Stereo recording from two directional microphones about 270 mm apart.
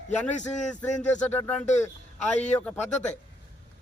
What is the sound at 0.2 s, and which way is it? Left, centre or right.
Speech, left.